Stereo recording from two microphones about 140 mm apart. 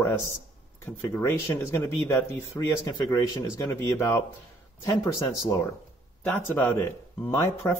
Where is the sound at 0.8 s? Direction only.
15° left (ahead or behind).